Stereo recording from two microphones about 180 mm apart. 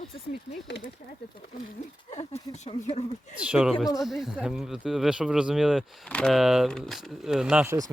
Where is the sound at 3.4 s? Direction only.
5° right (ahead or behind).